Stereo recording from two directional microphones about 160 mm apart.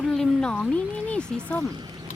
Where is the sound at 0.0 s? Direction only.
5° left (ahead or behind).